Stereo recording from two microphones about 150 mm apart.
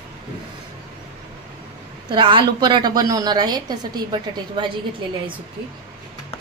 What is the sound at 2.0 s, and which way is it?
A woman's voice, 30° right (ahead or behind).